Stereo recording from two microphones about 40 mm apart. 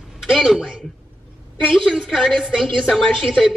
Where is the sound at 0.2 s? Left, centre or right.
Centre.